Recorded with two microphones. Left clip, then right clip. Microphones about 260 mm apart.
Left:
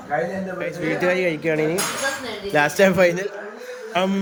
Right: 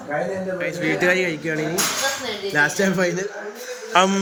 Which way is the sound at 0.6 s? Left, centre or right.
Centre.